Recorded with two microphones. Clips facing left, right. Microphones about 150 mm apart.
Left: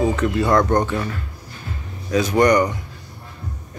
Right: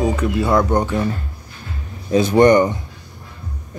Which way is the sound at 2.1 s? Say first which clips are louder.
Right 4 dB; 25° right (ahead or behind).